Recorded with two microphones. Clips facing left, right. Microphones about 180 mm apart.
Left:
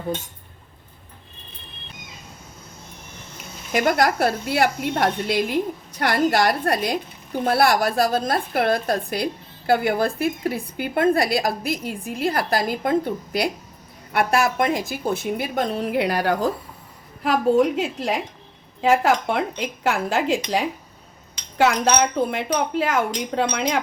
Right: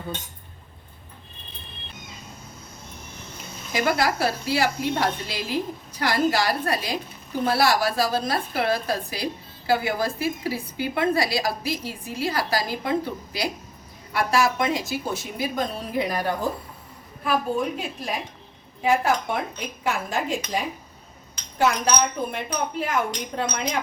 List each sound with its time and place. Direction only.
3.7 s a woman's voice: 55° left (ahead or behind); by 23.8 s 85° left